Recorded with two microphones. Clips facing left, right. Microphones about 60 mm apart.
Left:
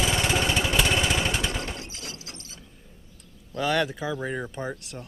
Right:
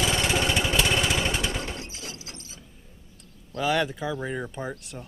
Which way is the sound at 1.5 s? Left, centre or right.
Centre.